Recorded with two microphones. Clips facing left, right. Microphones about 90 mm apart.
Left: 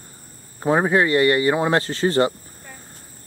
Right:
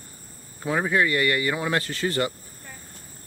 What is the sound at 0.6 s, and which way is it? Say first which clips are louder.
Speech: left 5 dB; 35° left (ahead or behind).